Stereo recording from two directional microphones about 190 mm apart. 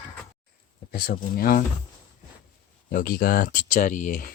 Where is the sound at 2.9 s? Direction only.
50° left (ahead or behind).